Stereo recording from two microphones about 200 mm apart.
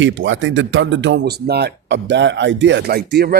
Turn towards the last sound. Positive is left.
turn(degrees=-50)  # may be behind; listen again after turning